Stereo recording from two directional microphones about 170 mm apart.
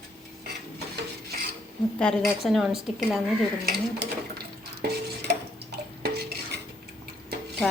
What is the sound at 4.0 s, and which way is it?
Dishes, 70° right (ahead or behind).